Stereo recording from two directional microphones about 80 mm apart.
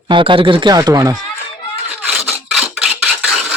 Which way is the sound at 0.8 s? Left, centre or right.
Right.